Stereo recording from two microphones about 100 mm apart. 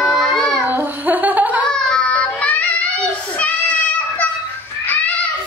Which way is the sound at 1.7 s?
5° left (ahead or behind).